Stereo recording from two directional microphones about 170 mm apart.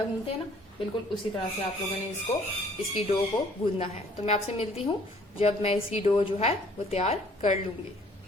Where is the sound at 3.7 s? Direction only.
40° left (ahead or behind).